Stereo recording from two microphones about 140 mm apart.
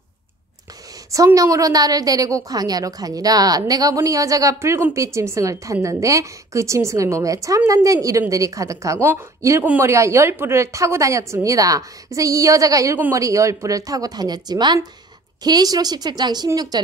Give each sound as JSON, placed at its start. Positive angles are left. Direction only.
{"t": 1.1, "sound": "a woman's voice", "side_deg": -25}